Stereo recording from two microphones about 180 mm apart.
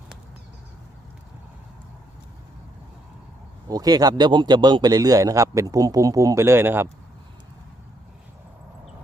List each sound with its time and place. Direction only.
3.7 s a man's voice: 20° right (ahead or behind)